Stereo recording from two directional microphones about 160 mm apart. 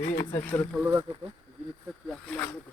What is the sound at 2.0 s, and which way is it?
Speech, 5° left (ahead or behind).